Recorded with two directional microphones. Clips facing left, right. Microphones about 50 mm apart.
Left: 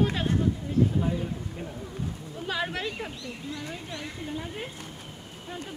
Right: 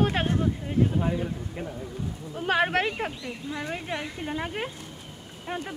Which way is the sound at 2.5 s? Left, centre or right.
Right.